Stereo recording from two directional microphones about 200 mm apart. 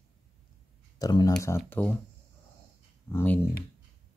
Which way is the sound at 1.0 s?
20° left (ahead or behind).